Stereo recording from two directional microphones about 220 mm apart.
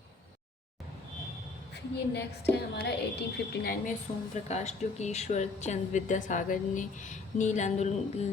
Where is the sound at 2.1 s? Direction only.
50° left (ahead or behind).